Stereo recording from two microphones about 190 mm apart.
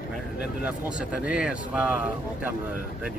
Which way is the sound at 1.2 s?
5° right (ahead or behind).